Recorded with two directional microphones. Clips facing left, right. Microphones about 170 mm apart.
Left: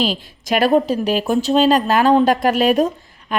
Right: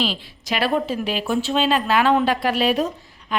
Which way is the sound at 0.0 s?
45° left (ahead or behind).